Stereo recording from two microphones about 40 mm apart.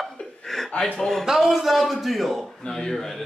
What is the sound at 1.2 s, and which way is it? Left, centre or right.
A man's voice, centre.